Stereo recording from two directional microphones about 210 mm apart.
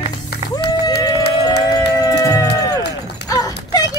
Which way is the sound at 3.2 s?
15° left (ahead or behind).